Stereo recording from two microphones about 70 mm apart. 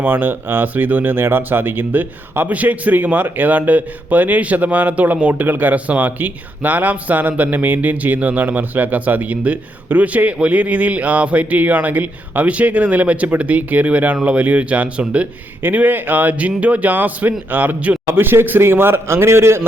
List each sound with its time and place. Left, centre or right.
0.0 s speech: right